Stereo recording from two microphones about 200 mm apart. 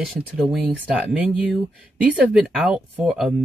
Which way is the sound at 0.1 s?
Centre (ahead or behind).